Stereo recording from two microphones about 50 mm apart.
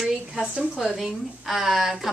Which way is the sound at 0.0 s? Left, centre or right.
Centre.